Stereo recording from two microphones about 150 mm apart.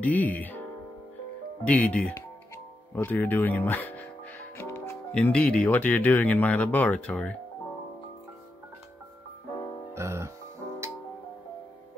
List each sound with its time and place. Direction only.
0.0 s speech: 10° left (ahead or behind)
9.9 s music: 20° right (ahead or behind)